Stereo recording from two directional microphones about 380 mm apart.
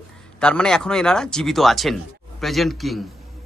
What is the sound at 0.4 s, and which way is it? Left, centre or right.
Speech, centre.